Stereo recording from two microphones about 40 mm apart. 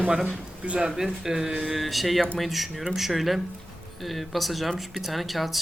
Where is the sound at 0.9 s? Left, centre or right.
Centre.